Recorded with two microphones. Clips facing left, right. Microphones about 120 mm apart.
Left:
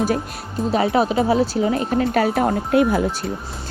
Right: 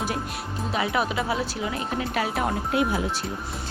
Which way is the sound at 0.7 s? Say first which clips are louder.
Left 8 dB; 35° left (ahead or behind).